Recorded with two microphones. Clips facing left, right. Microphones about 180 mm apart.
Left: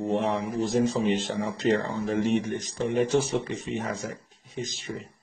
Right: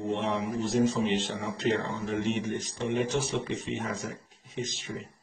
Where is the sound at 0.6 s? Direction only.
40° left (ahead or behind).